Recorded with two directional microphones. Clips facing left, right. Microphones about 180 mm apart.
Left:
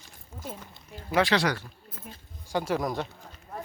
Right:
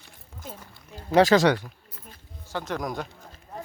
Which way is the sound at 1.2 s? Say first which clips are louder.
Right 6 dB; 45° right (ahead or behind).